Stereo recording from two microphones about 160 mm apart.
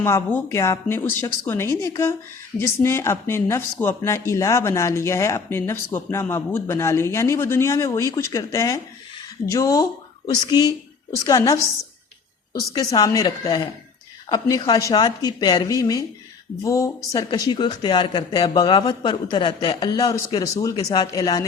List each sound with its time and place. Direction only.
0.0 s speech: 15° left (ahead or behind)